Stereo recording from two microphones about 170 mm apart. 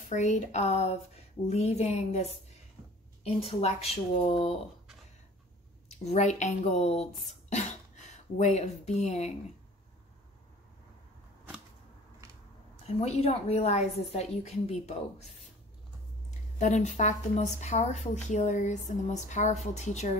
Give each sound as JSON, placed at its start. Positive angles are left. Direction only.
{"t": 0.0, "sound": "a woman's voice", "side_deg": 45}
{"t": 5.9, "sound": "speech", "side_deg": 40}
{"t": 12.8, "sound": "a woman's voice", "side_deg": 40}
{"t": 16.3, "sound": "speech", "side_deg": 45}